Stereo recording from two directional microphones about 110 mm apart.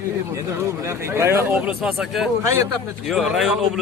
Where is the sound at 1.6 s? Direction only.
5° right (ahead or behind).